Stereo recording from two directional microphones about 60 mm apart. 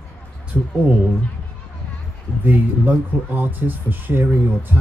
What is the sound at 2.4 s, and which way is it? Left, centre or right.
Speech, right.